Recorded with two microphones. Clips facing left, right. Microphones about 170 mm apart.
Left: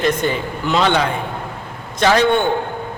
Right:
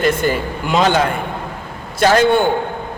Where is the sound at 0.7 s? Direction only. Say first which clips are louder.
Right 2 dB; 40° right (ahead or behind).